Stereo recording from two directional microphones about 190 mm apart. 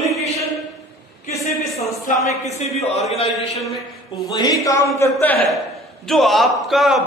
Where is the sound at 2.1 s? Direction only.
40° left (ahead or behind).